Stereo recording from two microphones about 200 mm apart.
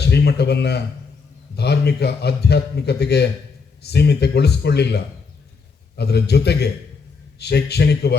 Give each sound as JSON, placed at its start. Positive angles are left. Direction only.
{"t": 0.1, "sound": "a man's voice", "side_deg": 55}